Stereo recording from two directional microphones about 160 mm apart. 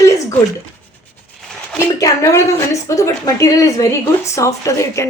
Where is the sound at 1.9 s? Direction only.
20° left (ahead or behind).